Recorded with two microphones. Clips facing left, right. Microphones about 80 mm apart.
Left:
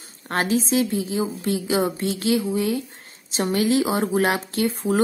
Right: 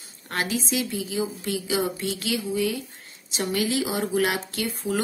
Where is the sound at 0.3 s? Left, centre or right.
Left.